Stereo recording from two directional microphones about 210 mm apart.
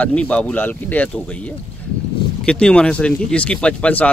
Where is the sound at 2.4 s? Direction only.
5° left (ahead or behind).